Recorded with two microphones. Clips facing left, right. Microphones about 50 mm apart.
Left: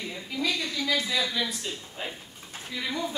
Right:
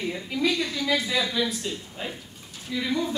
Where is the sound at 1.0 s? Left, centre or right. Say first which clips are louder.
Right 3 dB; centre.